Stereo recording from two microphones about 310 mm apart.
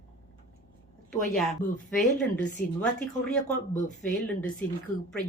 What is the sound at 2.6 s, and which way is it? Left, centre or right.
Speech, left.